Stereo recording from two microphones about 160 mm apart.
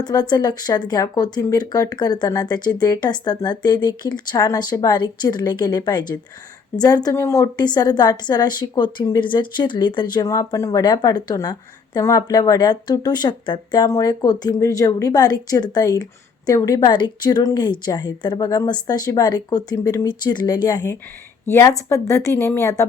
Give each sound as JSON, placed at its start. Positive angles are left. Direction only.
{"t": 0.0, "sound": "a woman's voice", "side_deg": 25}